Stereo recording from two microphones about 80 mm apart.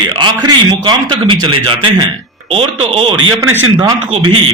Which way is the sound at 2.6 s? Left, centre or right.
Right.